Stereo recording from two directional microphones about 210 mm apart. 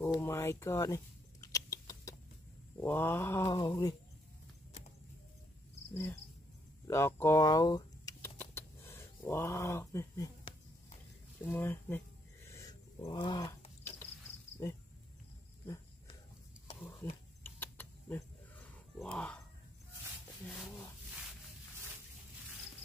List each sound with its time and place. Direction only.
0.0 s a sound: 15° left (ahead or behind)
2.8 s mantra: 10° left (ahead or behind)
5.9 s speech: 10° left (ahead or behind)
6.9 s rodents: 10° left (ahead or behind)
11.5 s mantra: 10° left (ahead or behind)
12.4 s dog: 15° left (ahead or behind)
15.6 s a sound: 15° left (ahead or behind)
17.0 s mantra: 10° left (ahead or behind)
17.4 s wild animals: 10° left (ahead or behind)
20.4 s a sound: 10° left (ahead or behind)